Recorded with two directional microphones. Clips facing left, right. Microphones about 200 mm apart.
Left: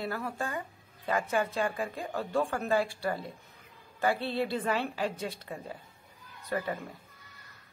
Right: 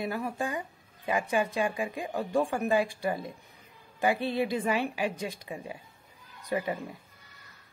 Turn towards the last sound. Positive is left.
turn(degrees=-15)  # may be behind; listen again after turning